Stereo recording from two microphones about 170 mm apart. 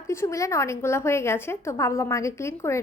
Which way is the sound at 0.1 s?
15° left (ahead or behind).